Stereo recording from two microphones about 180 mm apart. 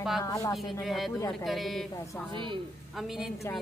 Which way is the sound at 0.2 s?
20° left (ahead or behind).